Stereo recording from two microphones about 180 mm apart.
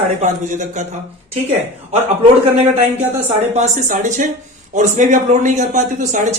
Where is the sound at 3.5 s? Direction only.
40° right (ahead or behind).